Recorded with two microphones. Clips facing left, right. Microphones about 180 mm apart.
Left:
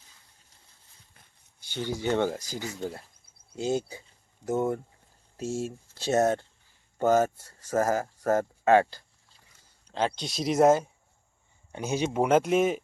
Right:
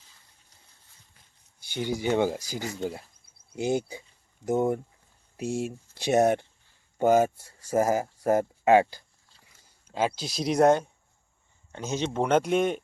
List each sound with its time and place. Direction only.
1.6 s speech: 15° right (ahead or behind)
11.7 s speech: 10° left (ahead or behind)